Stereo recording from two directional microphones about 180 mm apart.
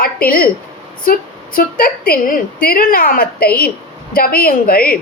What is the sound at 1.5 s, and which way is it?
A woman's voice, 55° left (ahead or behind).